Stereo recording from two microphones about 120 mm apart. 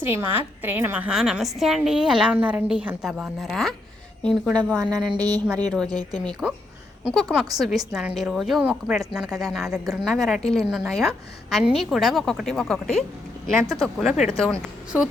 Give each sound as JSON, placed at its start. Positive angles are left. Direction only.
{"t": 0.1, "sound": "a woman's voice", "side_deg": -15}
{"t": 4.8, "sound": "speech", "side_deg": -35}
{"t": 5.5, "sound": "a woman's voice", "side_deg": 5}
{"t": 5.9, "sound": "speech", "side_deg": -35}
{"t": 7.1, "sound": "a woman's voice", "side_deg": 0}